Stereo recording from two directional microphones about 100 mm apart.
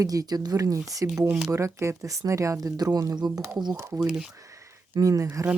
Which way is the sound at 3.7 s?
25° right (ahead or behind).